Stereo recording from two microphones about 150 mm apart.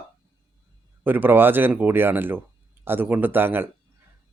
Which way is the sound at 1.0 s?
10° right (ahead or behind).